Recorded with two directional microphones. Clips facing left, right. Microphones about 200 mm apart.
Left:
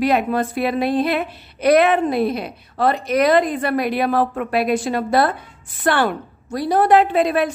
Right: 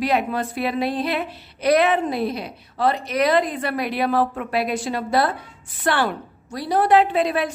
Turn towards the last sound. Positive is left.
turn(degrees=50)  # may be behind; listen again after turning